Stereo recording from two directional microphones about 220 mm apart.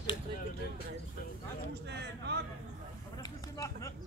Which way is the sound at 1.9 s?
50° right (ahead or behind).